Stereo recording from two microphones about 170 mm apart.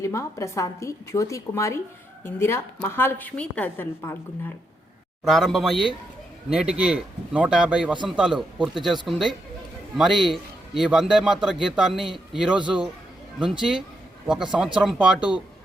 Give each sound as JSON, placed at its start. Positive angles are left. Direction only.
{"t": 0.0, "sound": "a woman's voice", "side_deg": 15}
{"t": 5.2, "sound": "a man's voice", "side_deg": 0}